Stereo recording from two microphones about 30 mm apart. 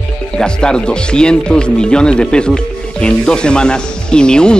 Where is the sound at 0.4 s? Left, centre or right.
Left.